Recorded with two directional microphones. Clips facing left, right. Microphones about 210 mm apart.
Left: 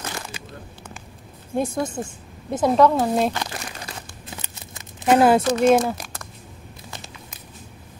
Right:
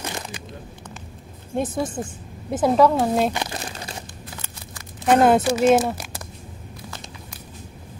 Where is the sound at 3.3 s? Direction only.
25° right (ahead or behind).